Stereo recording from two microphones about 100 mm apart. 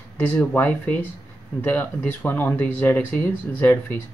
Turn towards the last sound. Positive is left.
turn(degrees=20)  # may be behind; listen again after turning